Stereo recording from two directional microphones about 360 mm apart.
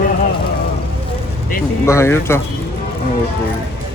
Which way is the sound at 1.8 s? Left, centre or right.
Centre.